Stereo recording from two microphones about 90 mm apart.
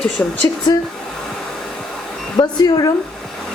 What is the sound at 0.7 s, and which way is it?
Speech, 35° left (ahead or behind).